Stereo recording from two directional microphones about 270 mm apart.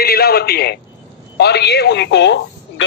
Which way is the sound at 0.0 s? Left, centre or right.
Left.